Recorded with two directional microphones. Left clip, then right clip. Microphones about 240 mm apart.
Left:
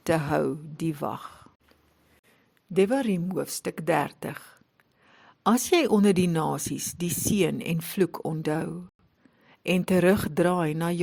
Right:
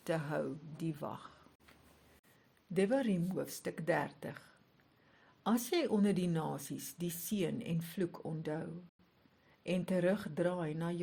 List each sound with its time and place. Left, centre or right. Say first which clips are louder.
0.0 s speech: left 12 dB; left
2.7 s speech: left 9 dB; left